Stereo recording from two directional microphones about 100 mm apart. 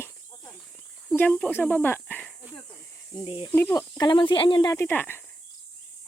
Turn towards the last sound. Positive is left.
turn(degrees=20)  # may be behind; listen again after turning